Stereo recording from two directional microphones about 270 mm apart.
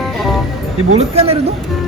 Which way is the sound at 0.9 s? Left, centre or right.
Right.